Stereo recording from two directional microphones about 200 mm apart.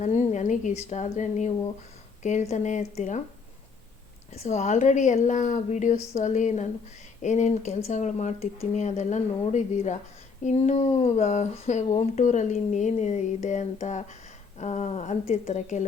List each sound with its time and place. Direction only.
0.0 s speech: 35° left (ahead or behind)
4.3 s speech: 35° left (ahead or behind)